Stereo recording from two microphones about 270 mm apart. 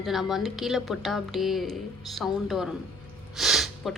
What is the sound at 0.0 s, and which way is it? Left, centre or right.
Speech, centre.